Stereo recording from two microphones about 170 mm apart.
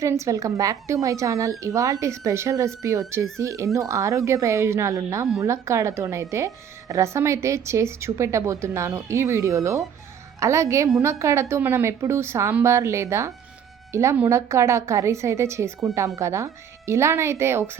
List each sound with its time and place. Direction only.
0.0 s a woman's voice: 15° right (ahead or behind)